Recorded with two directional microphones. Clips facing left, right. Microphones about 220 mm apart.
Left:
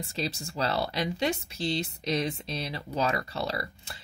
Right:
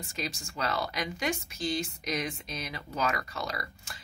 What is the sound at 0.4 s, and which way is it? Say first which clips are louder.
A woman's voice: left 2 dB; 35° left (ahead or behind).